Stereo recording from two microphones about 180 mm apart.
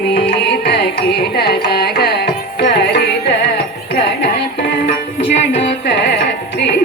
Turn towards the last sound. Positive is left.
turn(degrees=85)